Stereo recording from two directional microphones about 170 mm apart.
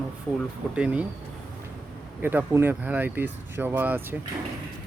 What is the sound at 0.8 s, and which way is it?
Speech, 10° right (ahead or behind).